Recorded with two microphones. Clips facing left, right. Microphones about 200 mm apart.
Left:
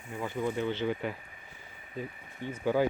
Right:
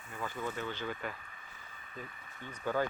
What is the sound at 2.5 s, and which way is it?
Speech, 10° left (ahead or behind).